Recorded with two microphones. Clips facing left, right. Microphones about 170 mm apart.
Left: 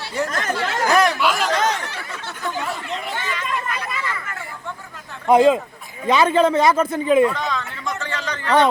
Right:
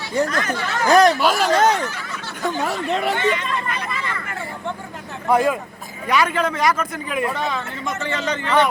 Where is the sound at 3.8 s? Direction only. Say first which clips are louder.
Even; 30° right (ahead or behind).